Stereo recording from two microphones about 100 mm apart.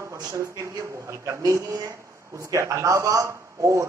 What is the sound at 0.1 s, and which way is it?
A man's voice, 30° right (ahead or behind).